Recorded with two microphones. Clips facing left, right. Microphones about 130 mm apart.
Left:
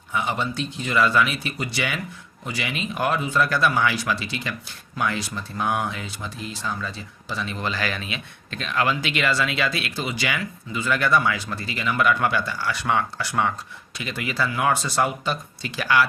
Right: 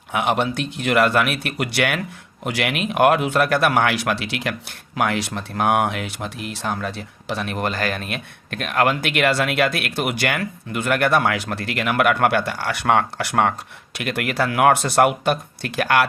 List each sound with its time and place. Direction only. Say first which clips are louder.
0.1 s speech: right 5 dB; 75° right (ahead or behind)